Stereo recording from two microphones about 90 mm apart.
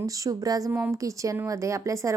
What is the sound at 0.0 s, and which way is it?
Speech, 40° right (ahead or behind).